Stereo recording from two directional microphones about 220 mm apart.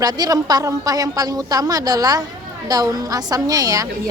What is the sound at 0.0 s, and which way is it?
A woman's voice, 15° right (ahead or behind).